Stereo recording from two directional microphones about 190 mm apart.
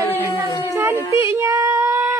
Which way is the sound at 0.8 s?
10° right (ahead or behind).